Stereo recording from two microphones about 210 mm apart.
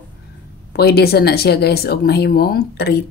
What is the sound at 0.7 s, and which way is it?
Speech, 50° left (ahead or behind).